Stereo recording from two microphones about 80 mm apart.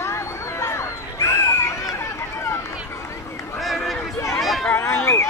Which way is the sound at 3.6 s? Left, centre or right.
Centre.